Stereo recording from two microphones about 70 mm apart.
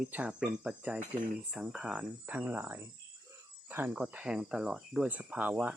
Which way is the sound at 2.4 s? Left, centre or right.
Right.